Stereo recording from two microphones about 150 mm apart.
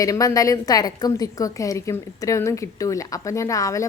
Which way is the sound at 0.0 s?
20° left (ahead or behind).